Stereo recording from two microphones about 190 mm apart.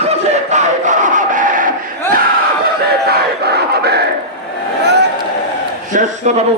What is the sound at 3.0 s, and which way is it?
Battle cry, 60° right (ahead or behind).